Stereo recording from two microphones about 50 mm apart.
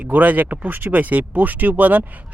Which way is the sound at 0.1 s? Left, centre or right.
Right.